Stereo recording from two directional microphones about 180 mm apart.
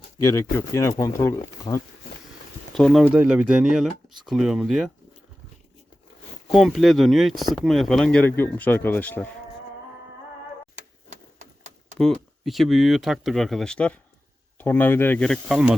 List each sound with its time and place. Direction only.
0.2 s speech: 15° left (ahead or behind)
2.7 s speech: 5° left (ahead or behind)
3.0 s speech: 10° right (ahead or behind)
6.5 s speech: centre (ahead or behind)
10.8 s a sound: 40° right (ahead or behind)
11.9 s speech: centre (ahead or behind)